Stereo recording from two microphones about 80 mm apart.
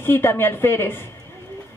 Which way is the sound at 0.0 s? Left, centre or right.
Left.